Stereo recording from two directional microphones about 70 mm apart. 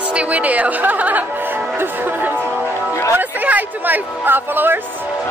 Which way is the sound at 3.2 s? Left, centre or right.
Right.